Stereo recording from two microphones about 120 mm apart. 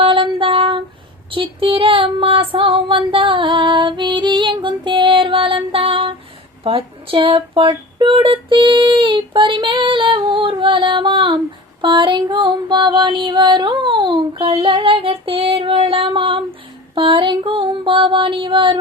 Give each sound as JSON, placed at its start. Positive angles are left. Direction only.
{"t": 0.0, "sound": "female singing", "side_deg": -45}
{"t": 6.7, "sound": "speech", "side_deg": -50}
{"t": 11.8, "sound": "female singing", "side_deg": -40}
{"t": 16.9, "sound": "speech", "side_deg": -45}